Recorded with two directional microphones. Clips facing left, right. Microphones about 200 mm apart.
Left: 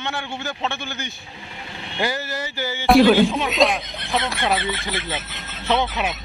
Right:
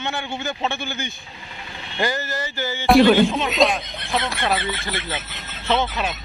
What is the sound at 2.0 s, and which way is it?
Speech, 10° left (ahead or behind).